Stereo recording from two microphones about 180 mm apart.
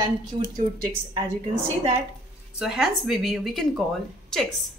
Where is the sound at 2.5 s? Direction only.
Centre (ahead or behind).